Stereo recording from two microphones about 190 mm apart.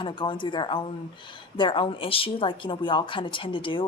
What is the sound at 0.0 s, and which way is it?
Speech, 25° left (ahead or behind).